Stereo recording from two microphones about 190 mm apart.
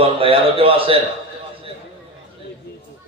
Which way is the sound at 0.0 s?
30° right (ahead or behind).